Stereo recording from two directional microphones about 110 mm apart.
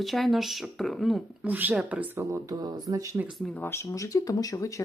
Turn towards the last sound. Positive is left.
turn(degrees=30)  # may be behind; listen again after turning